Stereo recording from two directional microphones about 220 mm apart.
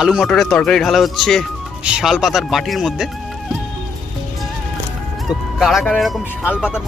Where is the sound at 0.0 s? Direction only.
Centre (ahead or behind).